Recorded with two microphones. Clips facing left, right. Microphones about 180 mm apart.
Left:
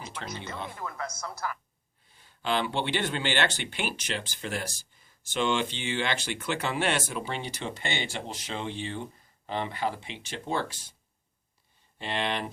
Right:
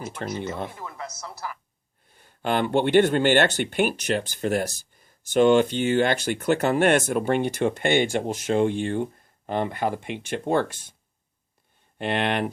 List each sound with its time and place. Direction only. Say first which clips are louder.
0.3 s speech: right 8 dB; 50° right (ahead or behind)
2.0 s speech: right 4 dB; 50° right (ahead or behind)
11.9 s speech: right 7 dB; 60° right (ahead or behind)